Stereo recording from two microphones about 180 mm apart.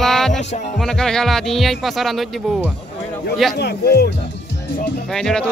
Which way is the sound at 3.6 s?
60° left (ahead or behind).